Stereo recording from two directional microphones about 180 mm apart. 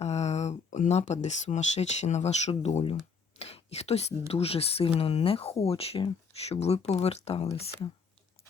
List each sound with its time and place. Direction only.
0.0 s speech: 35° left (ahead or behind)